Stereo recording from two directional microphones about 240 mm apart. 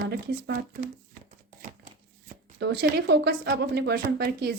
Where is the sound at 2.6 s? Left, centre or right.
Right.